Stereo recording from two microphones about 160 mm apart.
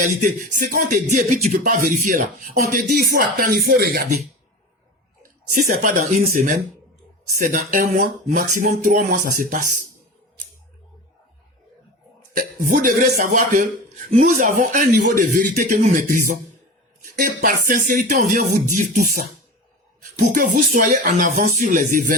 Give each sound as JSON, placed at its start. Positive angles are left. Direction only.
{"t": 0.2, "sound": "speech", "side_deg": -60}
{"t": 1.1, "sound": "speech", "side_deg": -45}
{"t": 5.5, "sound": "speech", "side_deg": -55}
{"t": 12.3, "sound": "speech", "side_deg": -60}